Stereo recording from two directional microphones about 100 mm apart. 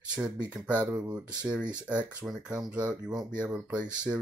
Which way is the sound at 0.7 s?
30° right (ahead or behind).